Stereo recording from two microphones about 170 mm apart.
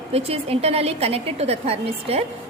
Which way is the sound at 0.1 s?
35° right (ahead or behind).